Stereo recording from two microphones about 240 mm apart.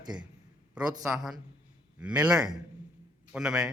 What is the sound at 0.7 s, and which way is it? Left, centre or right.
A man's voice, centre.